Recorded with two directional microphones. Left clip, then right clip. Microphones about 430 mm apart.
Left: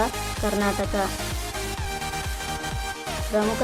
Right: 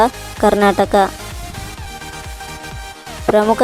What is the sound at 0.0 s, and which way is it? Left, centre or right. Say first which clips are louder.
Speech: right 12 dB; centre.